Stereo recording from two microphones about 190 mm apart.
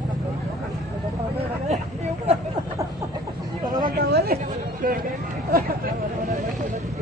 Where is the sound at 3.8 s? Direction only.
55° right (ahead or behind).